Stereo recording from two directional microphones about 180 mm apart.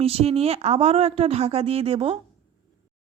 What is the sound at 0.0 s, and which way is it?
Speech, 35° right (ahead or behind).